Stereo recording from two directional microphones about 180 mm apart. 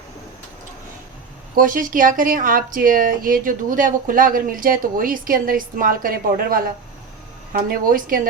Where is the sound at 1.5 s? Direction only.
50° right (ahead or behind).